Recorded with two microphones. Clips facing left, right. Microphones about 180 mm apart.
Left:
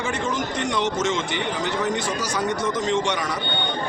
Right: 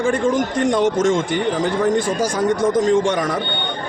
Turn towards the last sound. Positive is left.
turn(degrees=-50)  # may be behind; listen again after turning